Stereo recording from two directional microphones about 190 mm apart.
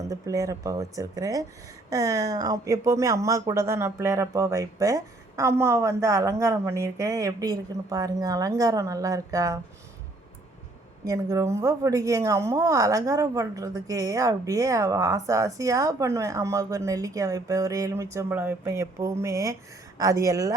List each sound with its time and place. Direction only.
0.1 s speech: 15° right (ahead or behind)
11.0 s speech: 15° right (ahead or behind)